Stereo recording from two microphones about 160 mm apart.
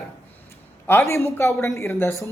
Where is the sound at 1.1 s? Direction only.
15° left (ahead or behind).